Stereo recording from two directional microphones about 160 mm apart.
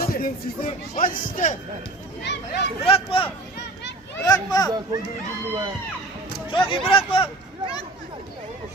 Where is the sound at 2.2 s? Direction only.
90° left.